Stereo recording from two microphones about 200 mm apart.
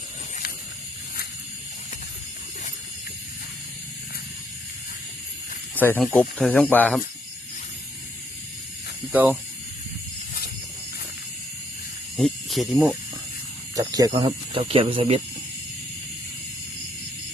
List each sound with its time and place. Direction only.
5.7 s speech: 10° left (ahead or behind)
9.1 s speech: 10° right (ahead or behind)
12.1 s speech: centre (ahead or behind)
13.7 s speech: 20° right (ahead or behind)